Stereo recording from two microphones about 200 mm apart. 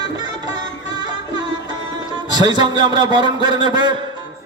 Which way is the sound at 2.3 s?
20° right (ahead or behind).